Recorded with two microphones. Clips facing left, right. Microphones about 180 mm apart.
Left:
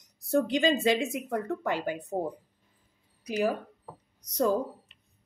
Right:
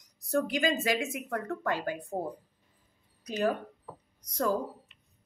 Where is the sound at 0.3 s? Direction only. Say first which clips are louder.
Left 4 dB; 25° left (ahead or behind).